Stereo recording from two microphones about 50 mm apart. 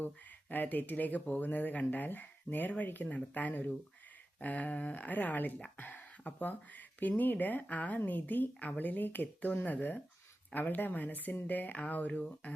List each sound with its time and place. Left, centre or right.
0.5 s speech: left